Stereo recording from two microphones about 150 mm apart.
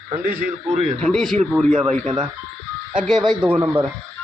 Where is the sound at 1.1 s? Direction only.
Centre (ahead or behind).